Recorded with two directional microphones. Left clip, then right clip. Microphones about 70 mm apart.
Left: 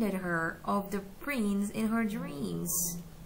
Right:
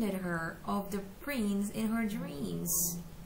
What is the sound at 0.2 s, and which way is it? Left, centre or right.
A woman's voice, left.